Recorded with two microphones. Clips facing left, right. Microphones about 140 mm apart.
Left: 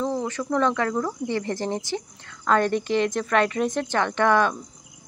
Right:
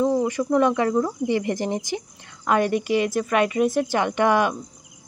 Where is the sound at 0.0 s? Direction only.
15° right (ahead or behind).